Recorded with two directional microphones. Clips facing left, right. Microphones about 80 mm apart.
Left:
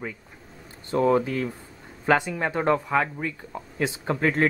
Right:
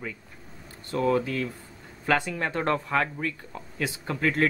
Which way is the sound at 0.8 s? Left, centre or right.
Left.